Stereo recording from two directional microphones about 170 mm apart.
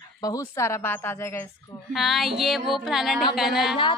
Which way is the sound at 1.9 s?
Centre (ahead or behind).